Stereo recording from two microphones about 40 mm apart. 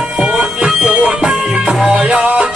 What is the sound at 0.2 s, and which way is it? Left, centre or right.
Music, centre.